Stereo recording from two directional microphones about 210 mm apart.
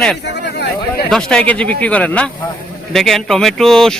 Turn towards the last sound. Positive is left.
turn(degrees=0)  # may be behind; listen again after turning